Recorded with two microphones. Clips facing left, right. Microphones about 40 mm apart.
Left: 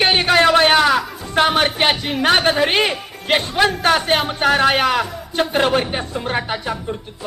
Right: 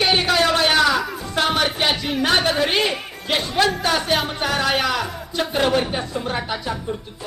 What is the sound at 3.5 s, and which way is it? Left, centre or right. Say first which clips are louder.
Speech: left 1 dB; left.